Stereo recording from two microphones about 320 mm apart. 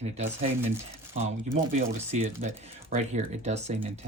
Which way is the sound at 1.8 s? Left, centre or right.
Right.